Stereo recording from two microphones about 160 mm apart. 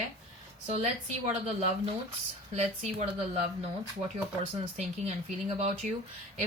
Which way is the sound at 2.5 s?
50° right (ahead or behind).